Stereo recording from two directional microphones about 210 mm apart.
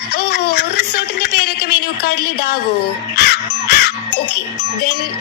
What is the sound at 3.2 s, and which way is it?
Crow, 50° left (ahead or behind).